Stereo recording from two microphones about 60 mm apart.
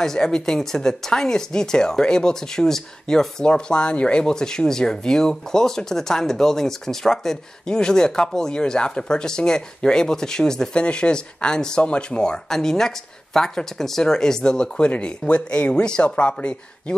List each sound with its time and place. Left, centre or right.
0.0 s speech: centre